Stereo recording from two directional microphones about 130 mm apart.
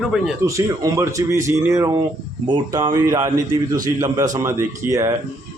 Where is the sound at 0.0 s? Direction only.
5° right (ahead or behind).